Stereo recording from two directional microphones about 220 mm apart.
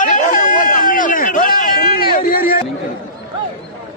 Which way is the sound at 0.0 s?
35° left (ahead or behind).